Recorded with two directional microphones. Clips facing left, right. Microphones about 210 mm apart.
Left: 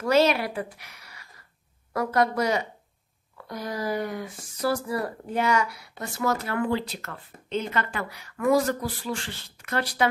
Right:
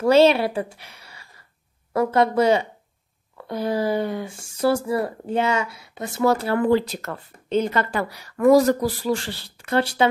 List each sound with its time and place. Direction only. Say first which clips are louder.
0.0 s a woman's voice: right 6 dB; 30° right (ahead or behind)